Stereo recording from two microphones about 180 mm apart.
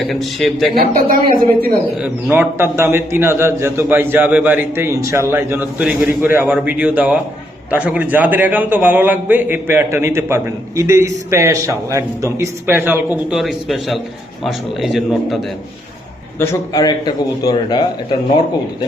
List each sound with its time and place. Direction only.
0.0 s a man's voice: centre (ahead or behind)
0.8 s speech: 50° right (ahead or behind)
2.0 s a man's voice: 5° right (ahead or behind)
16.4 s a man's voice: 15° left (ahead or behind)